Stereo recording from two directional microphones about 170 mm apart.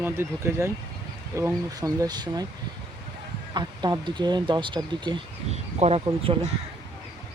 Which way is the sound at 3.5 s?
25° right (ahead or behind).